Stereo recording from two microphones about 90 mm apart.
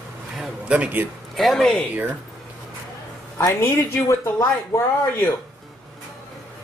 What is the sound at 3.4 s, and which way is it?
A woman's voice, 35° left (ahead or behind).